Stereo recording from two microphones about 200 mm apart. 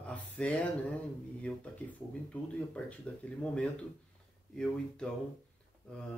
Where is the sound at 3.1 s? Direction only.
5° left (ahead or behind).